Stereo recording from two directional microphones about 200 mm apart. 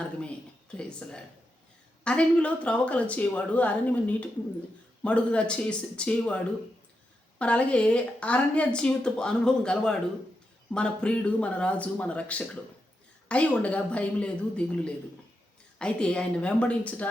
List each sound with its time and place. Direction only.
0.2 s a woman's voice: 5° left (ahead or behind)